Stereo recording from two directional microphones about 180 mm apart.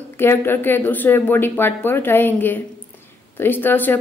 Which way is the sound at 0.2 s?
10° left (ahead or behind).